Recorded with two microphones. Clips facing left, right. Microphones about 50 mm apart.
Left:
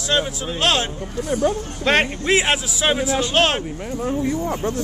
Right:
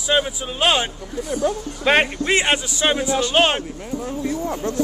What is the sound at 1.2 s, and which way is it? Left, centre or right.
Speech, left.